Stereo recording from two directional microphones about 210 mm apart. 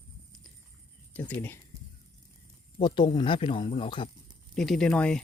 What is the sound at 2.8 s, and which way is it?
Speech, 20° left (ahead or behind).